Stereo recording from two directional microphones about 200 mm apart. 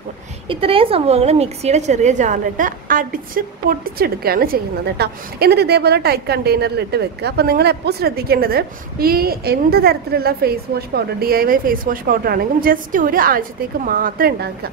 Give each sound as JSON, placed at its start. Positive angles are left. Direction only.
{"t": 0.5, "sound": "a woman's voice", "side_deg": -25}